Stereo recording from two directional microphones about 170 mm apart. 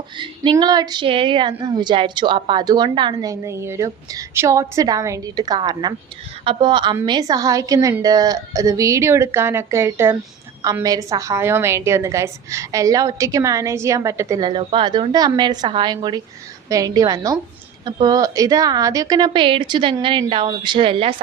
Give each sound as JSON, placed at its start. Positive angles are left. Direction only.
{"t": 0.5, "sound": "a woman's voice", "side_deg": -25}